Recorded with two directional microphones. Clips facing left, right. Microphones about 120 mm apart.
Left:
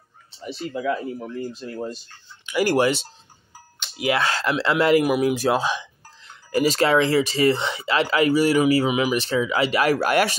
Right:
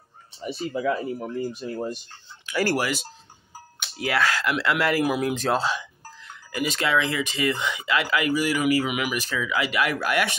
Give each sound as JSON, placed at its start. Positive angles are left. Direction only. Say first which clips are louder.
{"t": 0.7, "sound": "speech", "louder": "even", "side_deg": -5}
{"t": 2.5, "sound": "speech", "louder": "left 5 dB", "side_deg": 15}
{"t": 6.3, "sound": "speech", "louder": "left 7 dB", "side_deg": 40}